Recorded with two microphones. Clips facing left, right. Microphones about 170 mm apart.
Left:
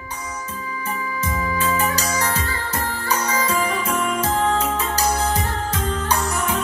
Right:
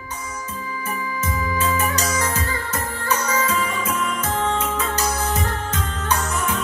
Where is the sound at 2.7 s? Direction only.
35° left (ahead or behind).